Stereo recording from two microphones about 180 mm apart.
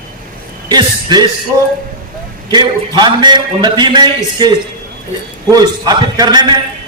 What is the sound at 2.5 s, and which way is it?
A man's voice, 25° right (ahead or behind).